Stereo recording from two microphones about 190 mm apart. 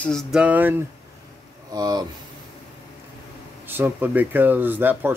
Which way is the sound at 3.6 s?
10° right (ahead or behind).